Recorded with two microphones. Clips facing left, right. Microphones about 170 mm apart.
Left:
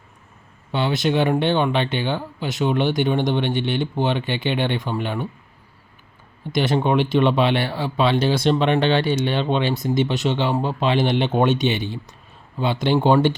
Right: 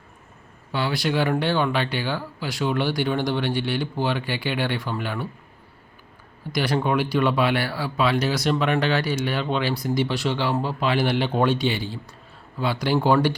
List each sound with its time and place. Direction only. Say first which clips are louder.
0.7 s speech: left 4 dB; 20° left (ahead or behind)
6.4 s speech: left 3 dB; 20° left (ahead or behind)